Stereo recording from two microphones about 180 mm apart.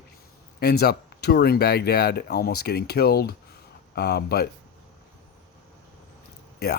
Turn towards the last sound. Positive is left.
turn(degrees=60)  # may be behind; listen again after turning